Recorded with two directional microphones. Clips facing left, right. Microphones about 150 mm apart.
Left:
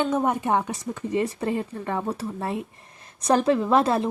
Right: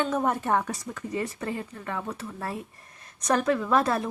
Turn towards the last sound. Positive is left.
turn(degrees=25)  # may be behind; listen again after turning